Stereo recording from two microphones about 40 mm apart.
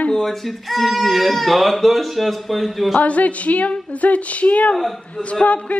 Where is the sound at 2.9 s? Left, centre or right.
Left.